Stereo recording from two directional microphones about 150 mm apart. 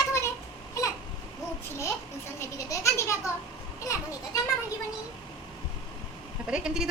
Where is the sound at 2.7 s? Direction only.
20° left (ahead or behind).